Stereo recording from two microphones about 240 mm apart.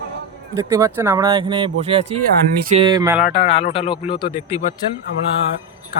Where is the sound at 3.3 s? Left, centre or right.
Left.